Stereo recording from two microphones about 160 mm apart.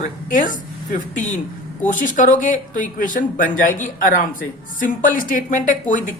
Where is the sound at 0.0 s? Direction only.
55° left (ahead or behind).